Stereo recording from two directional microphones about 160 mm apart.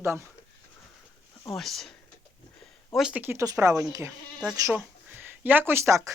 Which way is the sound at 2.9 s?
5° right (ahead or behind).